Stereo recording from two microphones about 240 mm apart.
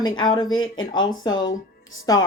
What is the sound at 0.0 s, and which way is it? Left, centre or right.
A woman's voice, centre.